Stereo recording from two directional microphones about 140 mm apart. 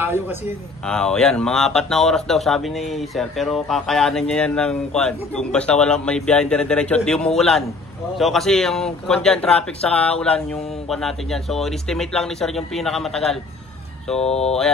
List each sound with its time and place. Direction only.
0.0 s speech: 15° right (ahead or behind)
0.8 s speech: 5° left (ahead or behind)
14.2 s speech: 50° left (ahead or behind)